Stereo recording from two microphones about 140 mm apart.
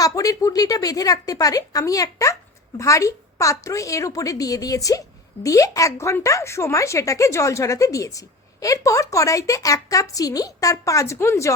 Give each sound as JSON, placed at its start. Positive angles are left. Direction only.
{"t": 0.0, "sound": "a woman's voice", "side_deg": 25}